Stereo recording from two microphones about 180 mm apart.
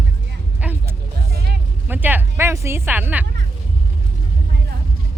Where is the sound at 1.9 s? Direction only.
10° right (ahead or behind).